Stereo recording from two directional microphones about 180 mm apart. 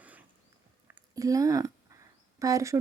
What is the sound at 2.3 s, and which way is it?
Speech, 20° right (ahead or behind).